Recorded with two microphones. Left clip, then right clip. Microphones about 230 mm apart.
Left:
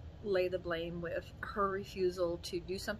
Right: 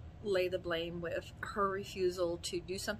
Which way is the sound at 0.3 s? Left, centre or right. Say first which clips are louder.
Even; centre.